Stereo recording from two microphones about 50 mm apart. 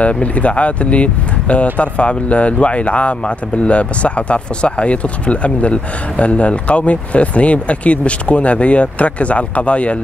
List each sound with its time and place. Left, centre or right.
0.0 s speech: left